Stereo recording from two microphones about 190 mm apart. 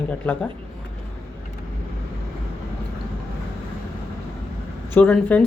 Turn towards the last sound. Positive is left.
turn(degrees=10)  # may be behind; listen again after turning